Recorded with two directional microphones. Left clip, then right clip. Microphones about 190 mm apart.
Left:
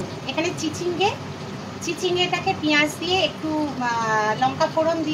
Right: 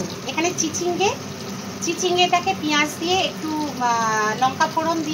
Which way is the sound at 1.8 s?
10° right (ahead or behind).